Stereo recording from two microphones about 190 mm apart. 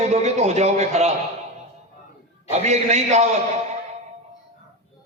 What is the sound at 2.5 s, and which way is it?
Speech, 35° right (ahead or behind).